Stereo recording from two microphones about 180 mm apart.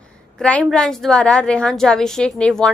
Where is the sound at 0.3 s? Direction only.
5° left (ahead or behind).